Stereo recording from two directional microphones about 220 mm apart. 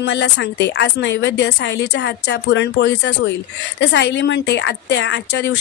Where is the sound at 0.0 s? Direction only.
50° left (ahead or behind).